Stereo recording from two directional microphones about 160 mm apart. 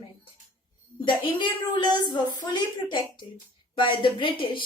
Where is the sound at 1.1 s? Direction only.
30° left (ahead or behind).